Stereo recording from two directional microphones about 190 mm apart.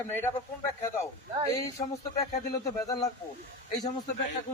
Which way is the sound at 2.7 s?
20° left (ahead or behind).